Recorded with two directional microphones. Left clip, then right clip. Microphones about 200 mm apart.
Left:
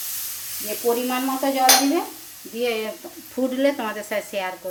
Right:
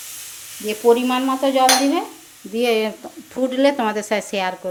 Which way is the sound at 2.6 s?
55° right (ahead or behind).